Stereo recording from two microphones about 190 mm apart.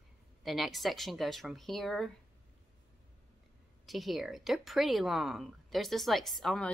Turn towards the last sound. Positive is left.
turn(degrees=0)  # may be behind; listen again after turning